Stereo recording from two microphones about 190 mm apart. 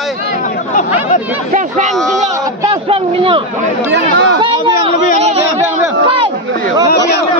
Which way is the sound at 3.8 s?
70° right (ahead or behind).